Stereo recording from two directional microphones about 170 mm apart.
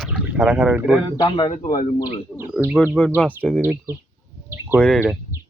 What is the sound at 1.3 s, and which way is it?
Speech, 35° left (ahead or behind).